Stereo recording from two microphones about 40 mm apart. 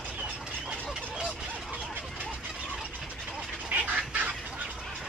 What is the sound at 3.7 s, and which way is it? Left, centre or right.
Fowl, right.